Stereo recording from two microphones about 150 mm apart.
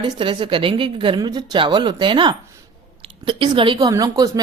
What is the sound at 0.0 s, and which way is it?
A woman's voice, 35° right (ahead or behind).